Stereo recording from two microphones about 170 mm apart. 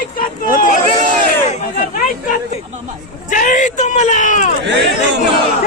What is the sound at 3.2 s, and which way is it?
Speech, 50° left (ahead or behind).